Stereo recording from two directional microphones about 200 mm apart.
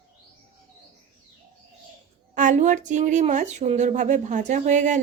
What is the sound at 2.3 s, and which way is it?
Speech, 40° right (ahead or behind).